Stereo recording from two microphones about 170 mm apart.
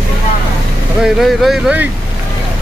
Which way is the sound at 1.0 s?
Centre (ahead or behind).